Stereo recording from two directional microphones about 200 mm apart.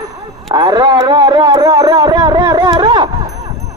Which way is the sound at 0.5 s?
20° right (ahead or behind).